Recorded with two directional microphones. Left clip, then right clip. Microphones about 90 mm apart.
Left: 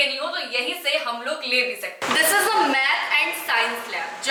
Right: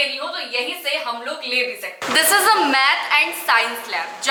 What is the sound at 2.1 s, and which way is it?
Speech, 20° left (ahead or behind).